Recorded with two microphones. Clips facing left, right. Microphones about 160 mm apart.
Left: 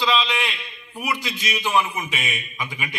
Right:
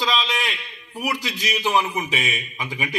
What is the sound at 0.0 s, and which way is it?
A man's voice, 40° right (ahead or behind).